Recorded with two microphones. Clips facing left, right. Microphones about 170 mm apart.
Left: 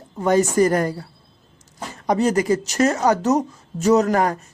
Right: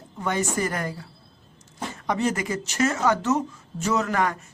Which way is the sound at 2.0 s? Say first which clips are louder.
Left 7 dB; 40° left (ahead or behind).